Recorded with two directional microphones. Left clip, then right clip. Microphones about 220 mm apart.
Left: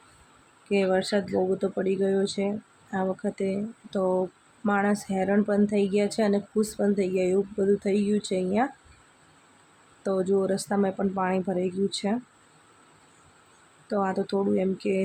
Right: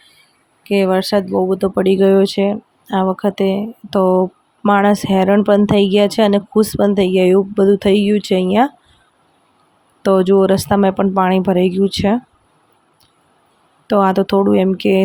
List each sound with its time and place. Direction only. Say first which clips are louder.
0.7 s speech: right 10 dB; 35° right (ahead or behind)
10.0 s speech: right 13 dB; 35° right (ahead or behind)
13.8 s speech: right 14 dB; 35° right (ahead or behind)